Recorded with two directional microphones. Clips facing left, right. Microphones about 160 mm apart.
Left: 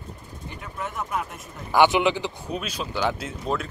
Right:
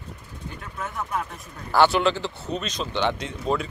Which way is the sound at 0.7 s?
5° left (ahead or behind).